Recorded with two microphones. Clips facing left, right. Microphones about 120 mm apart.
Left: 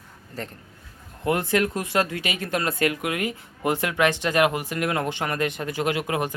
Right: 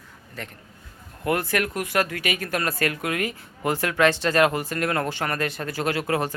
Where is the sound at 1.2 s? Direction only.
20° left (ahead or behind).